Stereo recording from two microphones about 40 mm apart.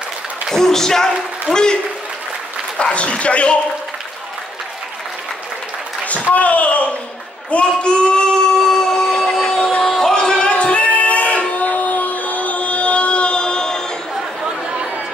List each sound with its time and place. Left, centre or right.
0.5 s speech: centre
2.8 s a man's voice: left
6.3 s speech: left
7.5 s speech: left
8.5 s a sound: centre
9.6 s a sound: left
9.8 s singing: centre; by 11.4 s left
11.5 s music: left; by 13.8 s centre